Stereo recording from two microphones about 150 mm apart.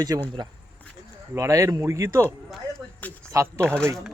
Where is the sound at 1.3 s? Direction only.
20° right (ahead or behind).